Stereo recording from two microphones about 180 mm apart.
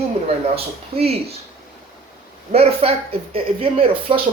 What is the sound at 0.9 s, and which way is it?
Speech, 35° right (ahead or behind).